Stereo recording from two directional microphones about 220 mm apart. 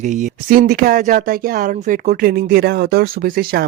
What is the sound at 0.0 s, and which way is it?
Speech, 35° right (ahead or behind).